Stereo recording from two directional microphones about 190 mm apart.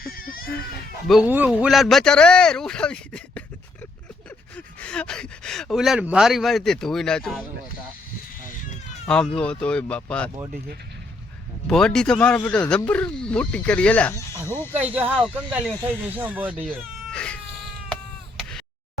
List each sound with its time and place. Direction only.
0.0 s baby cry: 50° left (ahead or behind)
1.0 s speech: 5° right (ahead or behind)
9.0 s speech: 5° left (ahead or behind)
11.7 s speech: 5° left (ahead or behind)
14.8 s speech: 10° right (ahead or behind)
16.6 s cat: 5° left (ahead or behind)
18.3 s a sound: centre (ahead or behind)